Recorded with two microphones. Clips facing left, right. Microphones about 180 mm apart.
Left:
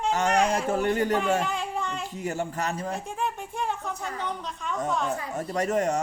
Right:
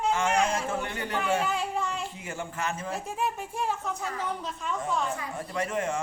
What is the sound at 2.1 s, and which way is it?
Speech, 40° left (ahead or behind).